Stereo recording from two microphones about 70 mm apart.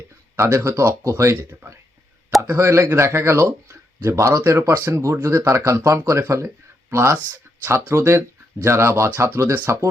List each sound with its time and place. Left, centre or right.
0.3 s speech: right